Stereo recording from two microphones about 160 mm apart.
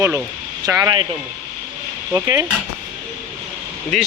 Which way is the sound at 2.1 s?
15° right (ahead or behind).